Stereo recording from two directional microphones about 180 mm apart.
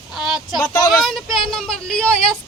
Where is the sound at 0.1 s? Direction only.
Centre (ahead or behind).